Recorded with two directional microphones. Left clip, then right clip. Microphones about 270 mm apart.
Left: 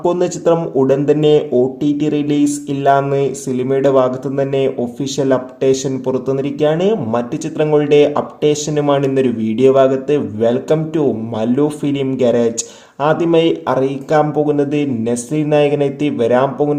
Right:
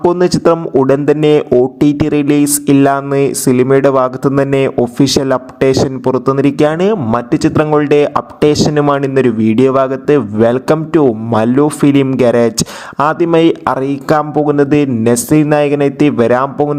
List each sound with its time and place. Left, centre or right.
0.0 s speech: right